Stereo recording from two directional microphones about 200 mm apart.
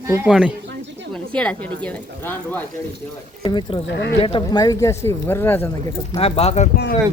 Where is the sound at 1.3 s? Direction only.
5° left (ahead or behind).